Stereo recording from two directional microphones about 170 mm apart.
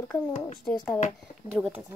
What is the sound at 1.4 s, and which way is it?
Speech, 5° right (ahead or behind).